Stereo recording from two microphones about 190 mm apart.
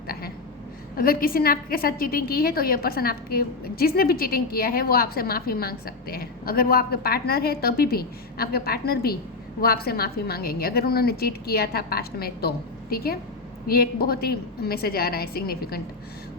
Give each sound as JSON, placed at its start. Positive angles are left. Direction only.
{"t": 0.9, "sound": "a woman's voice", "side_deg": 50}